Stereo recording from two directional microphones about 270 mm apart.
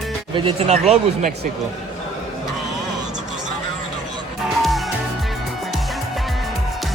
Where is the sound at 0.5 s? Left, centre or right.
Right.